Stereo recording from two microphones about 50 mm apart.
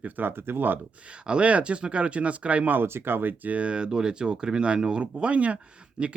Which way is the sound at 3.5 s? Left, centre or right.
Right.